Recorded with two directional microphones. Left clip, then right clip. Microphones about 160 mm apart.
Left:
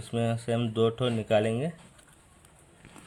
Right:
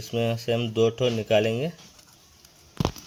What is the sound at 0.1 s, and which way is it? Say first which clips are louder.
Speech: right 4 dB; 20° right (ahead or behind).